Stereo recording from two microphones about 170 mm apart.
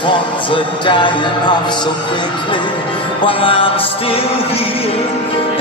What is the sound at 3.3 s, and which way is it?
Music, 30° left (ahead or behind).